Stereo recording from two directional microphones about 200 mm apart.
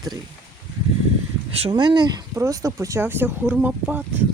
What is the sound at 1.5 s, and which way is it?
Speech, 25° right (ahead or behind).